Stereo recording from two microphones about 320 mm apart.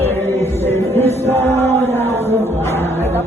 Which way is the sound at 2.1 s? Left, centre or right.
Centre.